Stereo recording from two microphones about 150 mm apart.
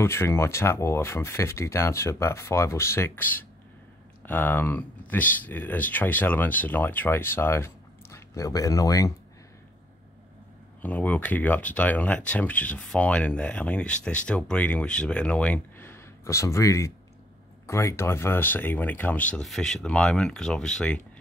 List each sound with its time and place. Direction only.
0.0 s speech: 15° left (ahead or behind)
10.8 s speech: 10° left (ahead or behind)